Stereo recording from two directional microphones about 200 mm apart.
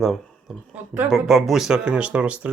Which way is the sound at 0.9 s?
Centre (ahead or behind).